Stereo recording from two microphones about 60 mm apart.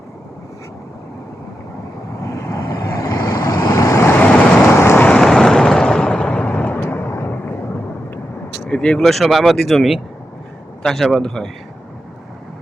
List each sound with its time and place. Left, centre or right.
2.6 s vehicle: left
4.0 s vehicle: left
4.8 s vehicle: left
5.2 s vehicle: centre; by 7.3 s left
8.7 s speech: centre
9.0 s a man's voice: centre